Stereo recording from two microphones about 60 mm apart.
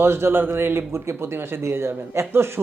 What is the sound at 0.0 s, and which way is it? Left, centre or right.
A man's voice, right.